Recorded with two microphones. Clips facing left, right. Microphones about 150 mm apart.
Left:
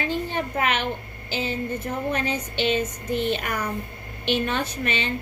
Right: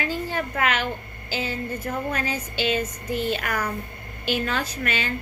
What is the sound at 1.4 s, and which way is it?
Speech, 25° left (ahead or behind).